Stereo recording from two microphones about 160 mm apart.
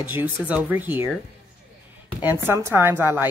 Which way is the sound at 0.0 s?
10° right (ahead or behind).